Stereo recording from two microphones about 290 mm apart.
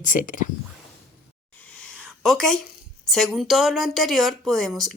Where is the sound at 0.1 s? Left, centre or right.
Left.